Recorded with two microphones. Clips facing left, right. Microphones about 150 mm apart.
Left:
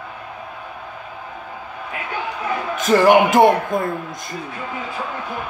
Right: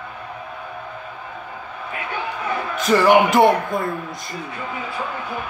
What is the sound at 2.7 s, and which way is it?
Speech, 45° left (ahead or behind).